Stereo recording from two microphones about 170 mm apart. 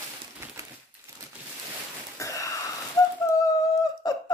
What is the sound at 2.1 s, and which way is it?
Wheeze, 20° left (ahead or behind).